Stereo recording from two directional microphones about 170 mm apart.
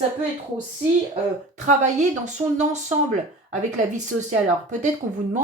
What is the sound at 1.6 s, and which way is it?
Speech, 45° right (ahead or behind).